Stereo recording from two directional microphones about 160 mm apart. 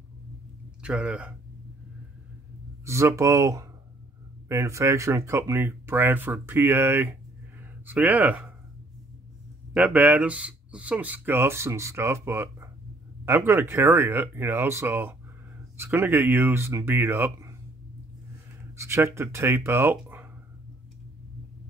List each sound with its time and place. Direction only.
0.8 s speech: 5° right (ahead or behind)
2.8 s speech: 15° right (ahead or behind)
9.8 s speech: 10° right (ahead or behind)
18.8 s speech: 15° right (ahead or behind)